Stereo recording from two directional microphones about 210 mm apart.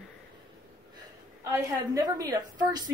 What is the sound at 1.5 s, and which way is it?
A woman's voice, 15° right (ahead or behind).